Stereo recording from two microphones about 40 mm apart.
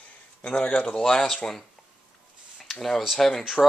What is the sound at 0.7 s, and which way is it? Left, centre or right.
Speech, centre.